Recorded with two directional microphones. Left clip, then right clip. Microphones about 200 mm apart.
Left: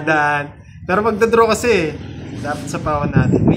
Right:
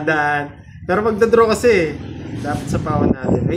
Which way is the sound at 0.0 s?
40° left (ahead or behind).